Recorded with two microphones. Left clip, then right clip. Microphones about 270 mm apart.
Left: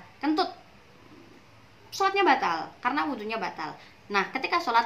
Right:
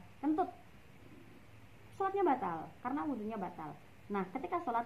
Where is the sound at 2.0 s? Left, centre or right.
Centre.